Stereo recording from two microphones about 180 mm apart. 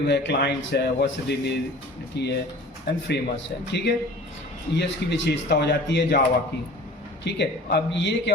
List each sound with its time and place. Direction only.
0.1 s a man's voice: 70° left (ahead or behind)
7.3 s a man's voice: 75° left (ahead or behind)